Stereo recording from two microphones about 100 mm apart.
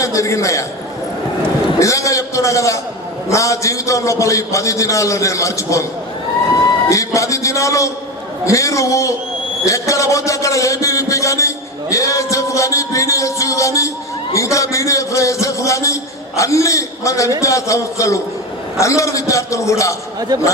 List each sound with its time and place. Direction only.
0.0 s a man's voice: 30° left (ahead or behind)
1.8 s a man's voice: 30° left (ahead or behind)
6.8 s a man's voice: 30° left (ahead or behind)
20.3 s speech: 40° right (ahead or behind)